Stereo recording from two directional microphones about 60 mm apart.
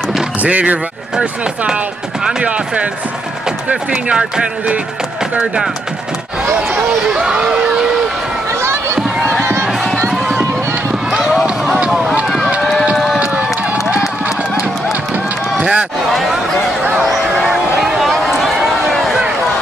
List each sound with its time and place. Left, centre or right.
0.4 s speech: right
2.2 s speech: centre
7.2 s speech: centre
9.4 s a sound: right
11.8 s run: centre
12.9 s a sound: centre
13.2 s run: right
15.6 s run: centre
16.1 s a sound: centre